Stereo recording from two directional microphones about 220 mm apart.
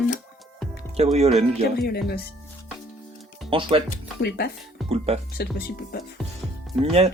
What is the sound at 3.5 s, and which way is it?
Speech, 25° right (ahead or behind).